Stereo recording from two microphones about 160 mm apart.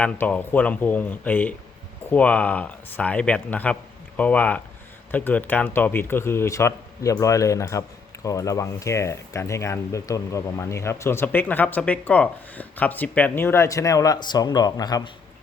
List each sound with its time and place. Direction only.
0.0 s speech: 10° left (ahead or behind)